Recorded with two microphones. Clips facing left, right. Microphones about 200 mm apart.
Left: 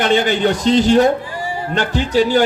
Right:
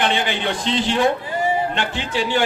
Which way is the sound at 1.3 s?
20° right (ahead or behind).